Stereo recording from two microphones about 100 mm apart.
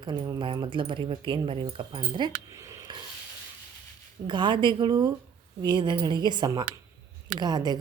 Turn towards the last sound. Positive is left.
turn(degrees=-45)  # may be behind; listen again after turning